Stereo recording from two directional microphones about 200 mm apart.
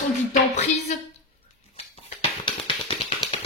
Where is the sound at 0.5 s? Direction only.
35° left (ahead or behind).